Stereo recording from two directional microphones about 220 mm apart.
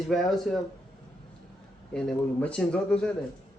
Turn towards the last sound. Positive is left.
turn(degrees=5)  # may be behind; listen again after turning